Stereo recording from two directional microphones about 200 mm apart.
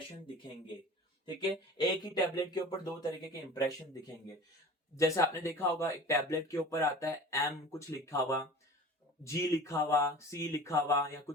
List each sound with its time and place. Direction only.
1.8 s speech: 20° left (ahead or behind)
4.9 s speech: 15° left (ahead or behind)